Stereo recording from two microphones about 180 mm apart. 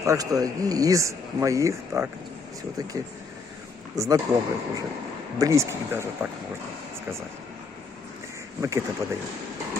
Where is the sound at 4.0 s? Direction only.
20° right (ahead or behind).